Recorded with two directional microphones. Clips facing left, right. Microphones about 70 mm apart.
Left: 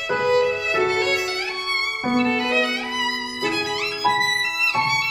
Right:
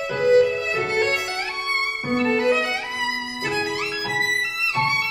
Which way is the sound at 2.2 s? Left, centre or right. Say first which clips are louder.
Right 2 dB; right.